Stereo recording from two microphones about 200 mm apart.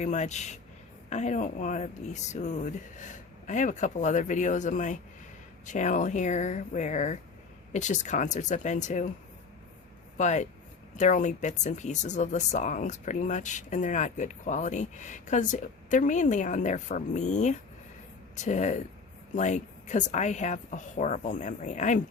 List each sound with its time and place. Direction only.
0.0 s speech: 35° left (ahead or behind)
10.2 s speech: 35° left (ahead or behind)